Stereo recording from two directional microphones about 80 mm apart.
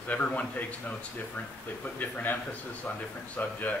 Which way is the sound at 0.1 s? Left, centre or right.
Centre.